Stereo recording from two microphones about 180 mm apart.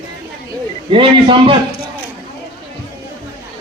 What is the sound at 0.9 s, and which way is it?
Speech, 30° right (ahead or behind).